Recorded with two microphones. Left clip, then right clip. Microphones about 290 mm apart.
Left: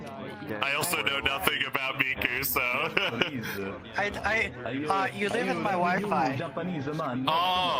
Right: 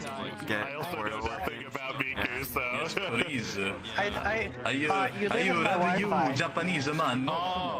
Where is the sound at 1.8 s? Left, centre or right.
Centre.